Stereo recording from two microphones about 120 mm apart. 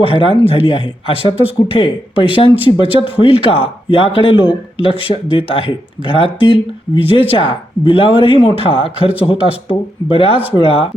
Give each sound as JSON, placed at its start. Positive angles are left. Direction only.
{"t": 0.0, "sound": "speech", "side_deg": 50}